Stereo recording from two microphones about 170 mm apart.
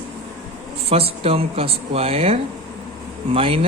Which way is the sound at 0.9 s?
35° right (ahead or behind).